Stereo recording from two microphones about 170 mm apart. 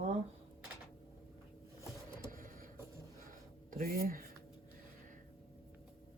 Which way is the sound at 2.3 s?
55° right (ahead or behind).